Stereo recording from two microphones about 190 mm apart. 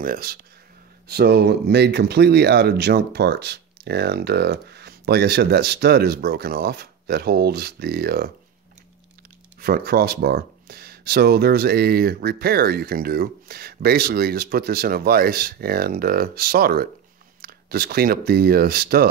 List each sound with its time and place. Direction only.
0.0 s speech: 50° right (ahead or behind)
9.6 s speech: 55° right (ahead or behind)